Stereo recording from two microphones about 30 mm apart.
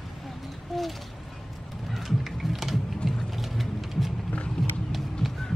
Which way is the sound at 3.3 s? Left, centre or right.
Centre.